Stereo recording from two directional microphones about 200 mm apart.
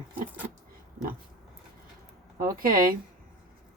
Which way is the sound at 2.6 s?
45° right (ahead or behind).